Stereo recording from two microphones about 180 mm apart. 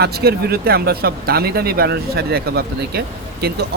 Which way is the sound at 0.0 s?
60° right (ahead or behind).